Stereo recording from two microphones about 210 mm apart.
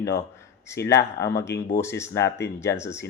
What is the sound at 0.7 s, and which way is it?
Speech, 15° left (ahead or behind).